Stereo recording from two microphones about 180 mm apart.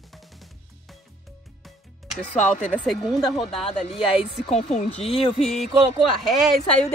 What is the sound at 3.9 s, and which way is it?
Speech, 35° left (ahead or behind).